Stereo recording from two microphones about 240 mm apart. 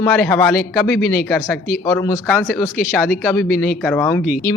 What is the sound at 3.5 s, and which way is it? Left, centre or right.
Speech, left.